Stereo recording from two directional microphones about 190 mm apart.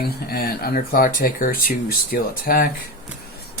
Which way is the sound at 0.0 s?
50° left (ahead or behind).